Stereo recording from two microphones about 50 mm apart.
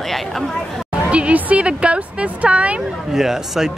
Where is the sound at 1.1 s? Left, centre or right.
Right.